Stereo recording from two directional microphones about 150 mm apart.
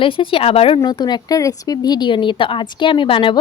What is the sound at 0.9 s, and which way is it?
Speech, 30° left (ahead or behind).